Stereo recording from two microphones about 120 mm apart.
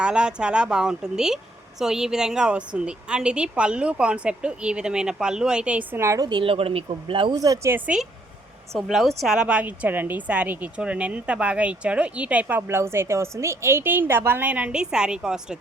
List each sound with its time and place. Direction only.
0.0 s a woman's voice: 10° right (ahead or behind)
6.0 s a woman's voice: 25° right (ahead or behind)
6.2 s speech: 45° right (ahead or behind)
7.3 s a woman's voice: 30° right (ahead or behind)
8.7 s a woman's voice: centre (ahead or behind)